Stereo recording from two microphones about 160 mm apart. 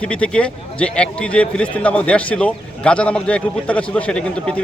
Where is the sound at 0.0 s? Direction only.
5° left (ahead or behind).